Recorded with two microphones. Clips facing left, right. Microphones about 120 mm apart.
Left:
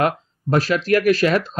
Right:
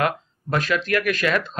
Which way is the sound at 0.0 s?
35° left (ahead or behind).